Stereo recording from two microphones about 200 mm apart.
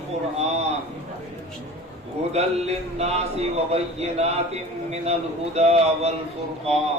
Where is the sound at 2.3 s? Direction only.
30° right (ahead or behind).